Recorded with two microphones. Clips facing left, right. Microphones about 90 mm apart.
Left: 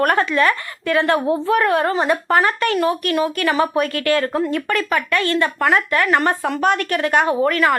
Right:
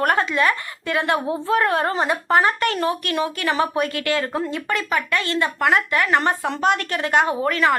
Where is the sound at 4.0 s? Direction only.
40° left (ahead or behind).